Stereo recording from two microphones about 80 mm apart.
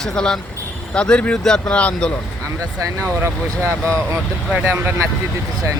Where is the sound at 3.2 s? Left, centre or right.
Right.